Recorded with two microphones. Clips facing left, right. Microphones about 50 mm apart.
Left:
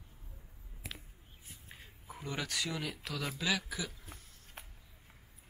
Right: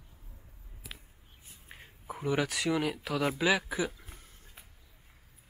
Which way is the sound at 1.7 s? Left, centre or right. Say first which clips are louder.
Right 8 dB; centre.